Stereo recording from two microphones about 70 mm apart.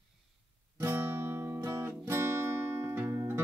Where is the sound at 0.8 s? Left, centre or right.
Right.